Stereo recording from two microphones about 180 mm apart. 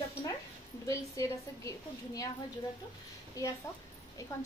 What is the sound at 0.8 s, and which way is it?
A woman's voice, 15° left (ahead or behind).